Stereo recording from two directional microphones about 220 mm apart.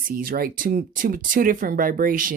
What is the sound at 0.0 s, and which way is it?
Speech, 40° right (ahead or behind).